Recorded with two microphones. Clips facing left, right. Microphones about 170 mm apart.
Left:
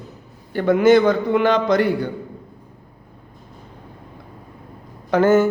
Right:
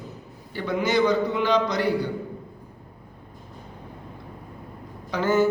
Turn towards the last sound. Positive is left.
turn(degrees=50)  # may be behind; listen again after turning